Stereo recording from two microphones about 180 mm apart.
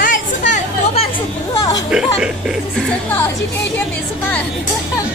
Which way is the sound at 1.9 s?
5° right (ahead or behind).